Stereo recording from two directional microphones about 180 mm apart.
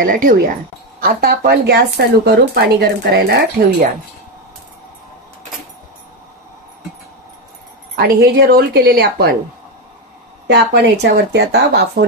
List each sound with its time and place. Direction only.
0.0 s speech: 50° right (ahead or behind); by 3.6 s 65° right (ahead or behind)
7.9 s speech: 60° right (ahead or behind)
10.4 s speech: 70° right (ahead or behind)